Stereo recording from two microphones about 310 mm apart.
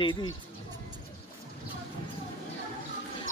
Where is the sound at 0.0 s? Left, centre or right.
Centre.